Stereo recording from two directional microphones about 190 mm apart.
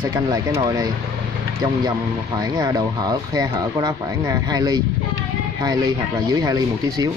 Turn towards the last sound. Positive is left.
turn(degrees=-20)  # may be behind; listen again after turning